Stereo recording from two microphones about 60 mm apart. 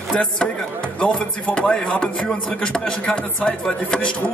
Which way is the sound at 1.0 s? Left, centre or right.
Centre.